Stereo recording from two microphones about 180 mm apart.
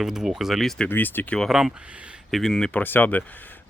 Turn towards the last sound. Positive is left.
turn(degrees=10)  # may be behind; listen again after turning